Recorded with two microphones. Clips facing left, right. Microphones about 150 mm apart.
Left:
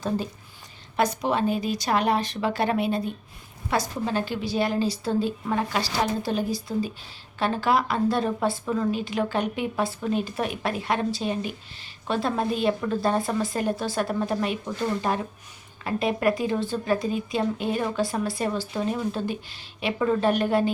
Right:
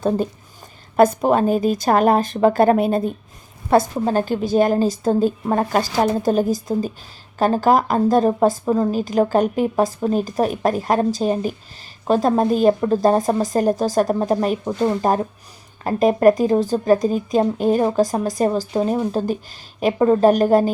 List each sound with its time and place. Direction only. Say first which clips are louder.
0.9 s a woman's voice: right 9 dB; 50° right (ahead or behind)